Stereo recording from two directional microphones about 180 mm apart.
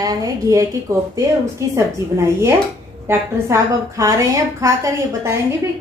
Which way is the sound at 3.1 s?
15° right (ahead or behind).